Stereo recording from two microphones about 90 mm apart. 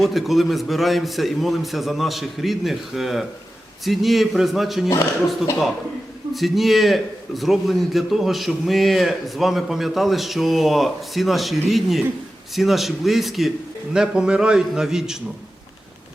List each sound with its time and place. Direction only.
0.0 s a man's voice: centre (ahead or behind)
6.3 s a man's voice: centre (ahead or behind)